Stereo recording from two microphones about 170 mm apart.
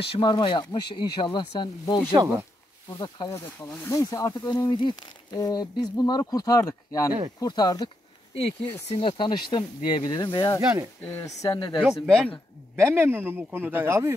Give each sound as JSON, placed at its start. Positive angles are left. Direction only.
{"t": 0.2, "sound": "speech", "side_deg": 30}
{"t": 2.1, "sound": "speech", "side_deg": -20}
{"t": 2.9, "sound": "speech", "side_deg": 20}
{"t": 8.5, "sound": "speech", "side_deg": 35}
{"t": 11.8, "sound": "speech", "side_deg": 0}
{"t": 12.7, "sound": "speech", "side_deg": -15}